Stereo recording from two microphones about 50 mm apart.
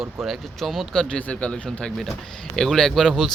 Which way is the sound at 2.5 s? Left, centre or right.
Centre.